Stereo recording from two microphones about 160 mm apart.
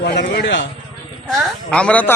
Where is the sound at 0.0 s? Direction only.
90° left.